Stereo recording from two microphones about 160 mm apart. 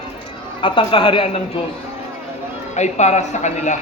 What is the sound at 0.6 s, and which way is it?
A man's voice, 30° left (ahead or behind).